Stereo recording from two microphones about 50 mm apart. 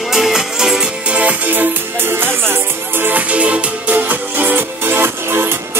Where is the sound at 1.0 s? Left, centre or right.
Right.